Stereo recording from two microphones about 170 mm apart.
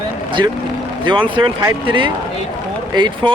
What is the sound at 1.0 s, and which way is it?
Speech, 30° right (ahead or behind).